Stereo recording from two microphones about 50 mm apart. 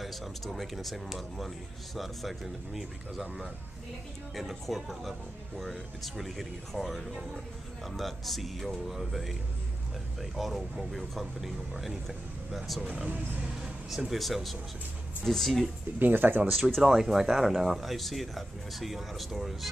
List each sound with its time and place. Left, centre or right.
0.0 s speech: centre
13.8 s speech: centre
16.0 s speech: right
16.8 s speech: centre